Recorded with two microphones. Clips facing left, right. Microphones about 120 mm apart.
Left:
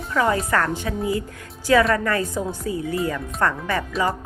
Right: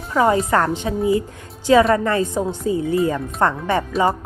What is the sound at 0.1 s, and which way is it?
A woman's voice, 25° right (ahead or behind).